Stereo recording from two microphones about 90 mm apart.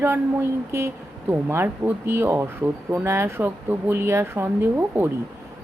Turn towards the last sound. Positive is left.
turn(degrees=-25)  # may be behind; listen again after turning